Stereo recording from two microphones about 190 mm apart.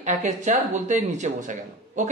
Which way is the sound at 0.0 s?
40° right (ahead or behind).